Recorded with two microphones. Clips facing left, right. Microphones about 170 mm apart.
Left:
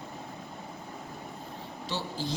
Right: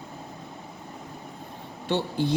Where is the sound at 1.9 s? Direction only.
60° right (ahead or behind).